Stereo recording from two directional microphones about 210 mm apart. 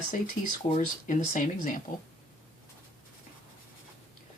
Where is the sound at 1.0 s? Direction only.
35° left (ahead or behind).